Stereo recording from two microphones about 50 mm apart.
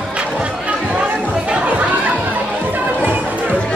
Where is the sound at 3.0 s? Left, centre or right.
Right.